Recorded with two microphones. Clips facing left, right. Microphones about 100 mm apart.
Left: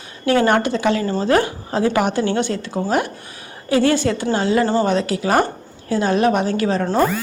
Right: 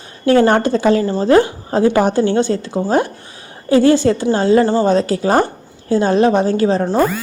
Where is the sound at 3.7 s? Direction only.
30° right (ahead or behind).